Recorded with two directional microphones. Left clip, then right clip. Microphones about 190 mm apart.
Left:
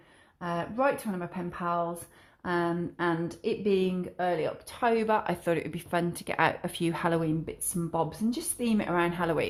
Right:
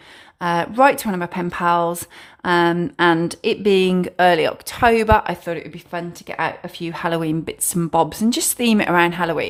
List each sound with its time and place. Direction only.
0.3 s speech: 30° right (ahead or behind)
2.4 s speech: 25° right (ahead or behind)
5.5 s speech: centre (ahead or behind)
7.2 s speech: 20° right (ahead or behind)
7.9 s speech: 35° right (ahead or behind); by 9.5 s 15° right (ahead or behind)